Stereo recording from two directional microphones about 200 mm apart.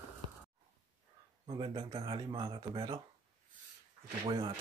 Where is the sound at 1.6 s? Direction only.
20° right (ahead or behind).